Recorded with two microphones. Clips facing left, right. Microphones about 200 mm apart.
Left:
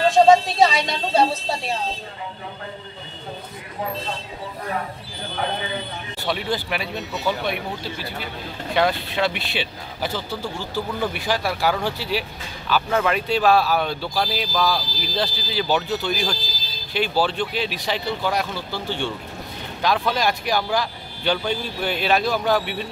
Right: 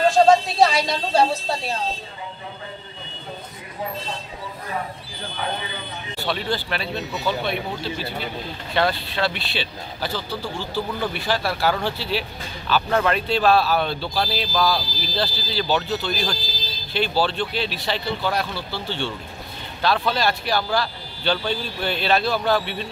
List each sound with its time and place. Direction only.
0.1 s speech: centre (ahead or behind)
6.2 s speech: 15° left (ahead or behind)
8.7 s speech: 15° left (ahead or behind)